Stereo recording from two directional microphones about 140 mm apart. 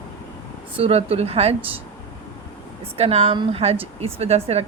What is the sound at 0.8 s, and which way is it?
Speech, 45° right (ahead or behind).